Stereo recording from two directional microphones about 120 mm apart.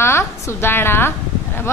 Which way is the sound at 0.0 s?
20° left (ahead or behind).